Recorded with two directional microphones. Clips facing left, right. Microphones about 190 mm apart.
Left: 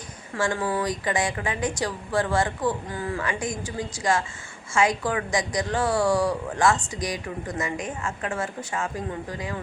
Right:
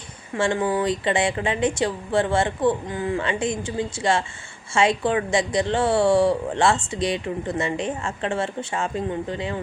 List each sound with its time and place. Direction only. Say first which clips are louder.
0.3 s a woman's voice: right 4 dB; 25° right (ahead or behind)